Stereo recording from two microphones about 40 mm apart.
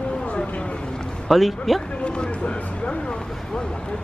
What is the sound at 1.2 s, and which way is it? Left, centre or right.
Speech, centre.